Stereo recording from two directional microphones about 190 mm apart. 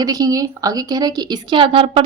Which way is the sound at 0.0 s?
20° right (ahead or behind).